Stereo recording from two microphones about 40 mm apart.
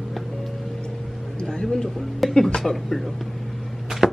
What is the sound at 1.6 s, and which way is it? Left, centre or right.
Speech, centre.